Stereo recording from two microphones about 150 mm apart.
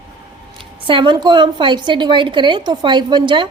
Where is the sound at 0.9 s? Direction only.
30° right (ahead or behind).